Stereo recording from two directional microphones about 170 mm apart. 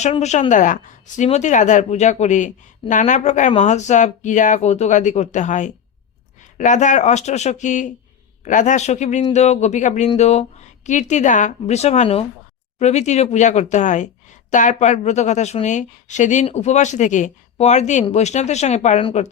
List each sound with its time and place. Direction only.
0.0 s a woman's voice: 40° left (ahead or behind)